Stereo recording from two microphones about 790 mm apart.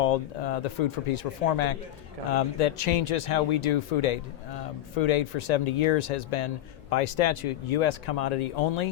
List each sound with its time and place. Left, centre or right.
0.0 s speech: left